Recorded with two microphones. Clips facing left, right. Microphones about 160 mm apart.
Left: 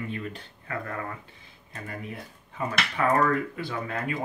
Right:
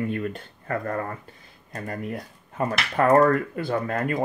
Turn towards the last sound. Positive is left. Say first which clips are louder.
# right 6 dB
turn(degrees=-50)  # may be behind; listen again after turning